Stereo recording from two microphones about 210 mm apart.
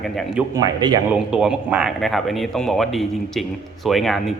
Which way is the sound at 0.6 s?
15° right (ahead or behind).